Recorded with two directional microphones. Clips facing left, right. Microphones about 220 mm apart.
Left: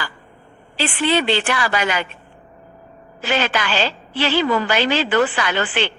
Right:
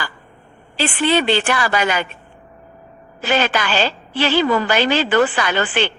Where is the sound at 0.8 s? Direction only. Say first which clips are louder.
Right 2 dB; 45° right (ahead or behind).